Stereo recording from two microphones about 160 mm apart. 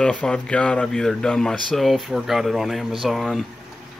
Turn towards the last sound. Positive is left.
turn(degrees=0)  # may be behind; listen again after turning